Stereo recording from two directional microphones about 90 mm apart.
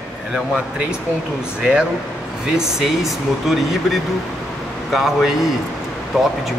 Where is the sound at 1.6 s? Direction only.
10° right (ahead or behind).